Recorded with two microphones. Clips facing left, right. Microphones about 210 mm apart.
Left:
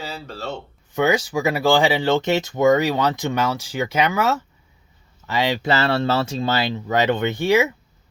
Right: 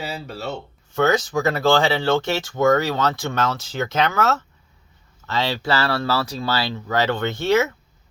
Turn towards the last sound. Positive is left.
turn(degrees=15)  # may be behind; listen again after turning